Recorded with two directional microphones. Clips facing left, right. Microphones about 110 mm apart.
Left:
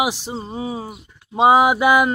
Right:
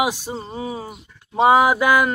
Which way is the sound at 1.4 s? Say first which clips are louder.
Left 1 dB; 15° left (ahead or behind).